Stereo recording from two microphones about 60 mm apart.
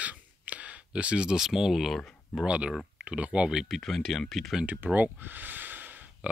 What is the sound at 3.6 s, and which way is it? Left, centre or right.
Speech, centre.